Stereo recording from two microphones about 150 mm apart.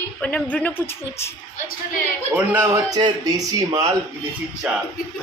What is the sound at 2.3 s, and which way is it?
Speech, 15° right (ahead or behind).